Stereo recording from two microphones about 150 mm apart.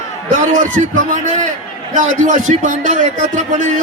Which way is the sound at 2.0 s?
55° right (ahead or behind).